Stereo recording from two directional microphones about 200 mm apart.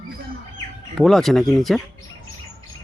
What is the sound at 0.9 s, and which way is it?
Speech, centre (ahead or behind).